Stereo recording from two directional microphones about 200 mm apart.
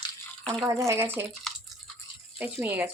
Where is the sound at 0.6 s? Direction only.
15° right (ahead or behind).